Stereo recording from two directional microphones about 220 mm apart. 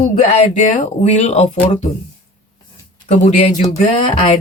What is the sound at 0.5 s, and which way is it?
Speech, 35° left (ahead or behind).